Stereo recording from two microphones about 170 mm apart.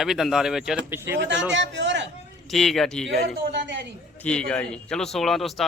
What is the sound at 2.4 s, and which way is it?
Speech, centre (ahead or behind).